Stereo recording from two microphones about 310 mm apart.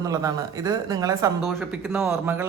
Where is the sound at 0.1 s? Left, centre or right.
Centre.